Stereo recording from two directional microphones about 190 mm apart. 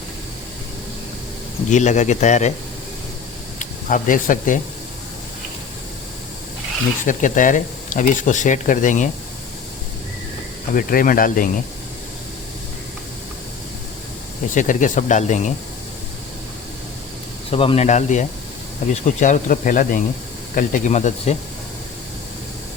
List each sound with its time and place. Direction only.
1.7 s speech: 40° left (ahead or behind)
3.6 s speech: 45° left (ahead or behind)
7.0 s speech: 40° left (ahead or behind)
10.8 s speech: 45° left (ahead or behind)
14.5 s speech: 40° left (ahead or behind)
17.5 s speech: 30° left (ahead or behind)